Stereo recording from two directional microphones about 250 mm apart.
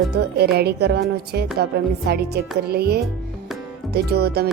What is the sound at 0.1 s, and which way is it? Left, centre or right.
Speech, right.